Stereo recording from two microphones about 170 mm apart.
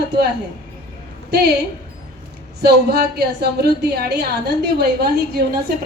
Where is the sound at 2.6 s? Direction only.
75° right (ahead or behind).